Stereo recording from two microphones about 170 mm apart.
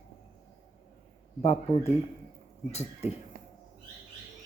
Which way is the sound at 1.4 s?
40° left (ahead or behind).